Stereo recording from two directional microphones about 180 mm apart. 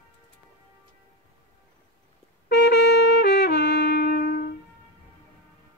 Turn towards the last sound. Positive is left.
turn(degrees=60)  # may be behind; listen again after turning